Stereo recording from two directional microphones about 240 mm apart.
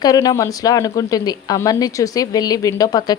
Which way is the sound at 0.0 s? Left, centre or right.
Centre.